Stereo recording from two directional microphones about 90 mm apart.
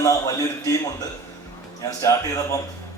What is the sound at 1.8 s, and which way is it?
Speech, 40° left (ahead or behind).